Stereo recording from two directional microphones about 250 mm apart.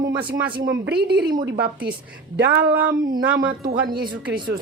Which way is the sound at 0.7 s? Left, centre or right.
Right.